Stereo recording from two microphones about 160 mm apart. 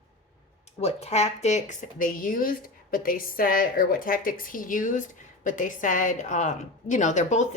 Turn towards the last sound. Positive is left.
turn(degrees=50)  # may be behind; listen again after turning